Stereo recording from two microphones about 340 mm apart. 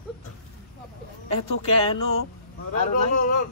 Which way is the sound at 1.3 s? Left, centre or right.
Centre.